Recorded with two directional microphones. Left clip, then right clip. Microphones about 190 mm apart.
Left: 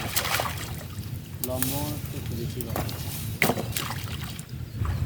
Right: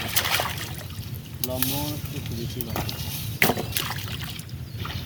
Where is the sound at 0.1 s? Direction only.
55° left (ahead or behind).